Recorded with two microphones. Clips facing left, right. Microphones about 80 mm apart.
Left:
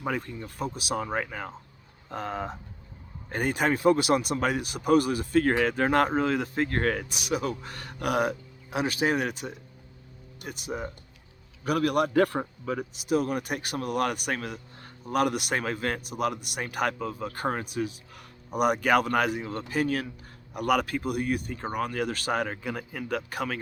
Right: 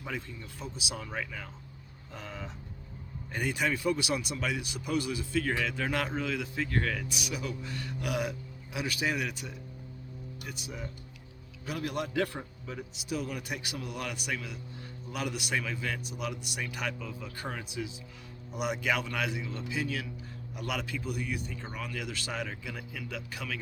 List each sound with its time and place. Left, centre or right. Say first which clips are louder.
0.0 s a man's voice: left 8 dB; left
11.6 s a man's voice: left 10 dB; left
13.0 s a man's voice: left 9 dB; left